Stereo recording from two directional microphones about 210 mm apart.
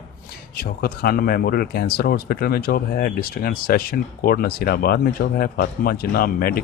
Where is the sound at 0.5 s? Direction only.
45° left (ahead or behind).